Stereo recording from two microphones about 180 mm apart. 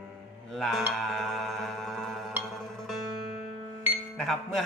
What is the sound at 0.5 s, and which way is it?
Music, centre (ahead or behind).